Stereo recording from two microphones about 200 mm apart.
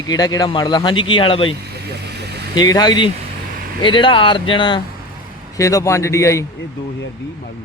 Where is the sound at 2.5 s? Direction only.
20° left (ahead or behind).